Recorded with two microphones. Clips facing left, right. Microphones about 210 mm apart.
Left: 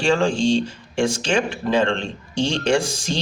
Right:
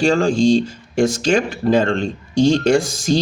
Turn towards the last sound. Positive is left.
turn(degrees=-40)  # may be behind; listen again after turning